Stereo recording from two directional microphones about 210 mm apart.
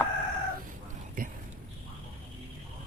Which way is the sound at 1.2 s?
40° right (ahead or behind).